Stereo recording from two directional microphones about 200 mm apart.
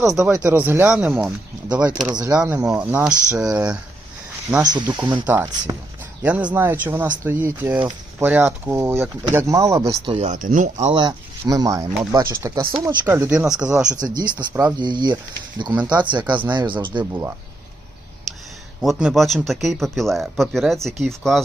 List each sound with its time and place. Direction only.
0.3 s speech: 10° right (ahead or behind)
2.1 s speech: 20° right (ahead or behind)
2.4 s speech: 5° right (ahead or behind)
4.5 s speech: 20° right (ahead or behind)
9.8 s speech: 25° right (ahead or behind)
11.0 s speech: 20° right (ahead or behind); by 13.8 s 5° right (ahead or behind)
14.0 s speech: 20° right (ahead or behind)
14.3 s speech: 10° right (ahead or behind)
14.8 s speech: 20° right (ahead or behind)
18.8 s speech: centre (ahead or behind)